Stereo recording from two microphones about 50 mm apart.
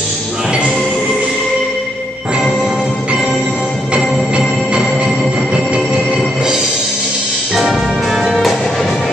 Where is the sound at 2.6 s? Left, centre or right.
Centre.